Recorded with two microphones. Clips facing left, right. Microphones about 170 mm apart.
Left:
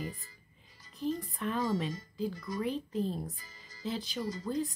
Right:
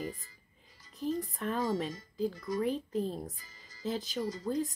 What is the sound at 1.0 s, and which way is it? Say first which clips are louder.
Speech: even; 40° right (ahead or behind).